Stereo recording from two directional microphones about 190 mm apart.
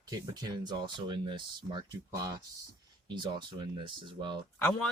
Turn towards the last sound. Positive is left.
turn(degrees=10)  # may be behind; listen again after turning